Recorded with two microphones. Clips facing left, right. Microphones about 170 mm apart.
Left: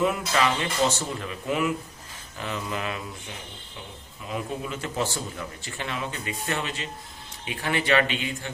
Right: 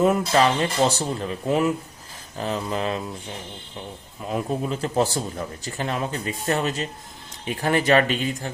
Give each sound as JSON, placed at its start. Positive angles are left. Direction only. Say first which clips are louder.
{"t": 0.0, "sound": "a man's voice", "louder": "right 5 dB", "side_deg": -35}
{"t": 4.3, "sound": "a man's voice", "louder": "right 6 dB", "side_deg": -40}